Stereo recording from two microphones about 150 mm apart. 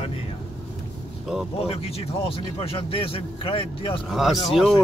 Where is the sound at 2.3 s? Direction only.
35° left (ahead or behind).